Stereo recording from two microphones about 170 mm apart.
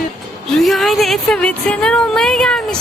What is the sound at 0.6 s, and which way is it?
Speech, centre (ahead or behind).